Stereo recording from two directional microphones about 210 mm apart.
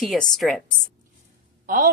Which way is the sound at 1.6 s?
40° right (ahead or behind).